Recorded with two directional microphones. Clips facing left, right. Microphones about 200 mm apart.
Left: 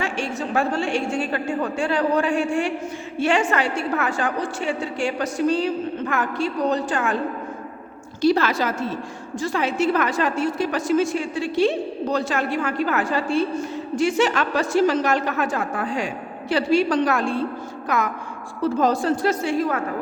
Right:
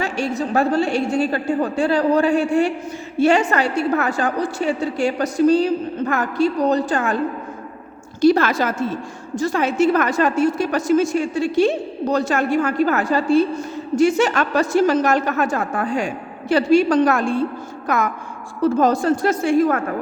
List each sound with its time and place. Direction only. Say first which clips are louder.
0.0 s a woman's voice: right 4 dB; 40° right (ahead or behind)
8.2 s a woman's voice: right 4 dB; 50° right (ahead or behind)